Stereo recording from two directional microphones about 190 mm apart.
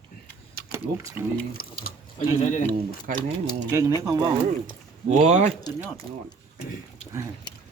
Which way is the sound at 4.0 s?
20° right (ahead or behind).